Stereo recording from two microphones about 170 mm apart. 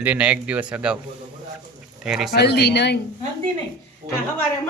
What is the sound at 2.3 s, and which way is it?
Speech, 75° left (ahead or behind).